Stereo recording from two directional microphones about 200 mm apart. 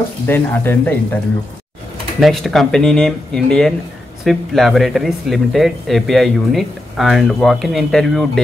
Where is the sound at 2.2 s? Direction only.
Centre (ahead or behind).